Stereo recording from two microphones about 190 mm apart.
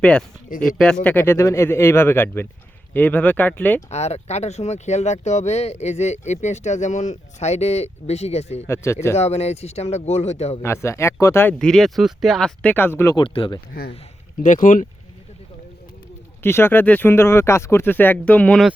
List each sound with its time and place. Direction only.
0.0 s speech: 5° left (ahead or behind)
3.8 s speech: 35° left (ahead or behind)
8.6 s speech: 15° left (ahead or behind)
9.1 s speech: 35° left (ahead or behind)
10.6 s speech: 15° left (ahead or behind)
13.2 s speech: 25° left (ahead or behind)
14.4 s speech: 45° left (ahead or behind)
16.4 s speech: 10° left (ahead or behind)